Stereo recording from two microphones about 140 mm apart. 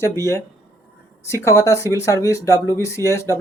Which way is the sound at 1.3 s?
20° left (ahead or behind).